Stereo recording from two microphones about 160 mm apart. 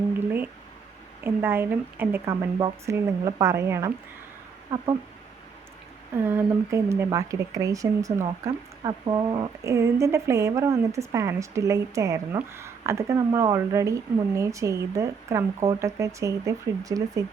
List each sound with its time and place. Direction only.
0.3 s a sound: 10° right (ahead or behind)
1.2 s speech: 15° right (ahead or behind)
6.2 s speech: 15° right (ahead or behind)